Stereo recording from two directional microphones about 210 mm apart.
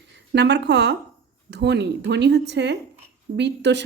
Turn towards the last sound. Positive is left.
turn(degrees=-55)  # may be behind; listen again after turning